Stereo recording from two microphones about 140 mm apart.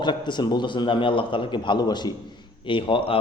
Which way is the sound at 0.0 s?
35° left (ahead or behind).